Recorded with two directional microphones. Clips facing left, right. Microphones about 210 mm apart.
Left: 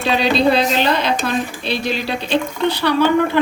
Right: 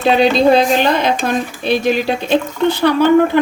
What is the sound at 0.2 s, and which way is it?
Speech, 50° right (ahead or behind).